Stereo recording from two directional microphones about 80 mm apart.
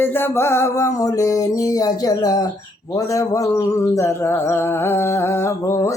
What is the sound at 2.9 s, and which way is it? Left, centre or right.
Speech, left.